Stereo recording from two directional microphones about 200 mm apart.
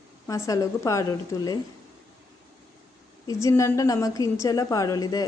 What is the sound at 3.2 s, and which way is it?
A woman's voice, 15° left (ahead or behind).